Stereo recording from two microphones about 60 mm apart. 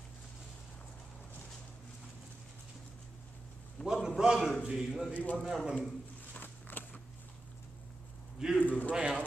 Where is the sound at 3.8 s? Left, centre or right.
Centre.